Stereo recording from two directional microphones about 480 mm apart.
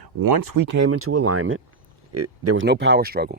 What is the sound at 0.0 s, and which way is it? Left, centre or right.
Speech, right.